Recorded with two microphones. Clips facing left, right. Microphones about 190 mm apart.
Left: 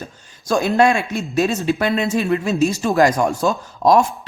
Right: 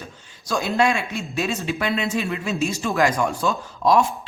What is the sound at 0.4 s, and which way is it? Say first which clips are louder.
A woman's voice: left 5 dB; 50° left (ahead or behind).